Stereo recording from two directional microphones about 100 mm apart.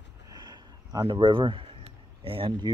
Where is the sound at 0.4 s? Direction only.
45° right (ahead or behind).